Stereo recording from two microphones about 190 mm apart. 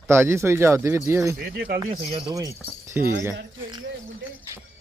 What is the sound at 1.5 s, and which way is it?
Speech, 55° right (ahead or behind).